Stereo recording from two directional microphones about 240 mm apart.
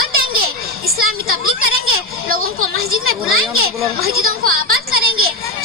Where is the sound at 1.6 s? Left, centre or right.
Right.